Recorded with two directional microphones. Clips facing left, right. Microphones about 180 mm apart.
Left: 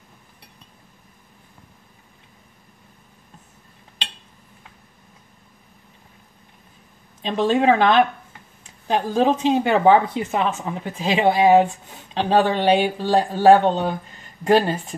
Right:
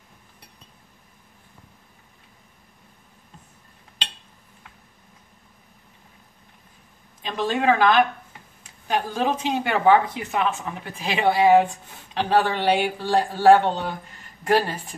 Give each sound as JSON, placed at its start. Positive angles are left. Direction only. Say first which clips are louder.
{"t": 7.2, "sound": "speech", "louder": "left 6 dB", "side_deg": 25}